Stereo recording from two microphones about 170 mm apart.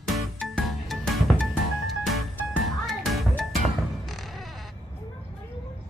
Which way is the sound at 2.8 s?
Centre (ahead or behind).